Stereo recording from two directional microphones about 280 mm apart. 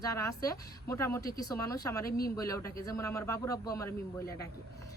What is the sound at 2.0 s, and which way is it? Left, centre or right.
Speech, left.